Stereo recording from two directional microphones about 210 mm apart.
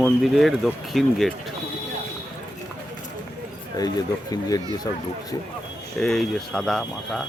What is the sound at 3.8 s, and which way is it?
Speech, 15° left (ahead or behind).